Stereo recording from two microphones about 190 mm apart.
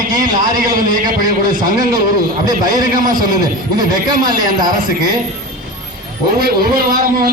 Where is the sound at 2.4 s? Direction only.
20° right (ahead or behind).